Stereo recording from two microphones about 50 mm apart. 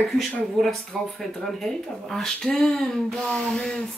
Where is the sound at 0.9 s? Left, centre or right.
Centre.